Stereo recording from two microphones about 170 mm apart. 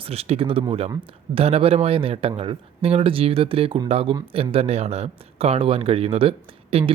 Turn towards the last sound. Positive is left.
turn(degrees=-35)  # may be behind; listen again after turning